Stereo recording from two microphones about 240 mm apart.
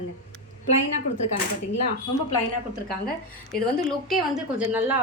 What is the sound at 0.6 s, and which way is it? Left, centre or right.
Speech, left.